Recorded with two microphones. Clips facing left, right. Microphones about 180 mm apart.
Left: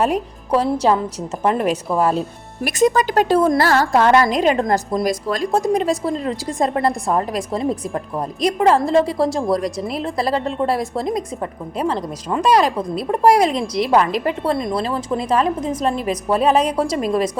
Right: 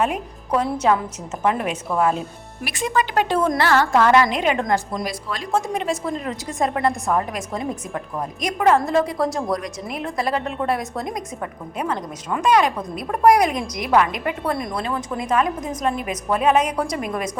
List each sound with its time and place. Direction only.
0.0 s speech: 35° left (ahead or behind)